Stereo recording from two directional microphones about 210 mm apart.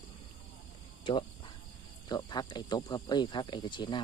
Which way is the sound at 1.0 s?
20° left (ahead or behind).